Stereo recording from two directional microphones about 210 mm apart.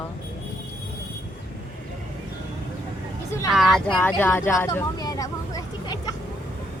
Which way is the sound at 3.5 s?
Centre (ahead or behind).